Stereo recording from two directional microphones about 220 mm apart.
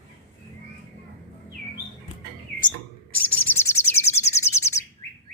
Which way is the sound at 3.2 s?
10° left (ahead or behind).